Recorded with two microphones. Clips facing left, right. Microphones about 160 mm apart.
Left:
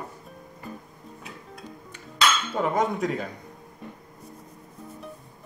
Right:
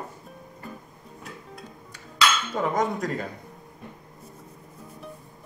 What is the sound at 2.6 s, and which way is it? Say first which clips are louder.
Speech: left 1 dB; centre (ahead or behind).